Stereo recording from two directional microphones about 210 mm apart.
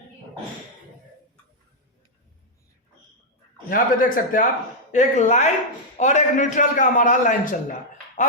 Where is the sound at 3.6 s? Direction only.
40° left (ahead or behind).